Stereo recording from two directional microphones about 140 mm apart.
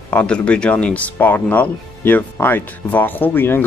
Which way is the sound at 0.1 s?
10° left (ahead or behind).